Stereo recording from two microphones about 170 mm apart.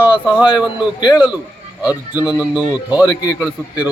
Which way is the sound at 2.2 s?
10° right (ahead or behind).